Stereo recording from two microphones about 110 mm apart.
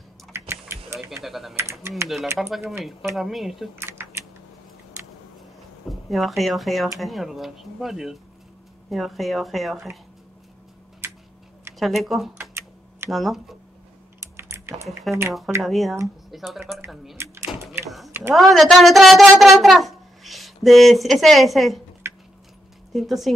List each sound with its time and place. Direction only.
0.3 s typing: 20° right (ahead or behind)
0.9 s speech: centre (ahead or behind)
1.6 s speech: 25° right (ahead or behind)
2.4 s speech: centre (ahead or behind)
3.7 s typing: 25° right (ahead or behind)
5.9 s speech: centre (ahead or behind)
11.0 s tick-tock: 20° right (ahead or behind)
11.8 s speech: centre (ahead or behind)
12.4 s typing: 20° right (ahead or behind)
13.1 s speech: centre (ahead or behind)
14.3 s typing: 25° right (ahead or behind)
15.6 s a woman's voice: centre (ahead or behind)
22.0 s a sound: 25° right (ahead or behind)
22.9 s speech: centre (ahead or behind)